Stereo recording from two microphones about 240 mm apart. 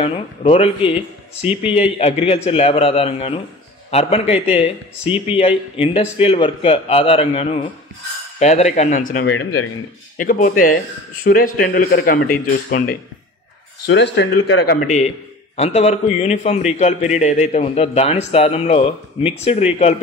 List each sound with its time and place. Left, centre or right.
0.0 s a man's voice: left
9.2 s speech: left
10.1 s speech: left
13.8 s speech: left
14.9 s a man's voice: left